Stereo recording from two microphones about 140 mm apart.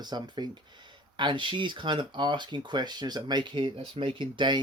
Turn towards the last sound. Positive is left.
turn(degrees=-35)  # may be behind; listen again after turning